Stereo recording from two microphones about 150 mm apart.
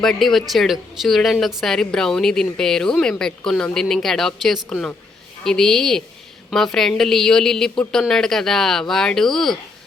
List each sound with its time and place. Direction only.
0.0 s a woman's voice: centre (ahead or behind)